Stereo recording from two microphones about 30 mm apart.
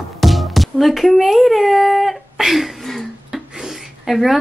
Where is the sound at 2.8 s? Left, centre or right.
Centre.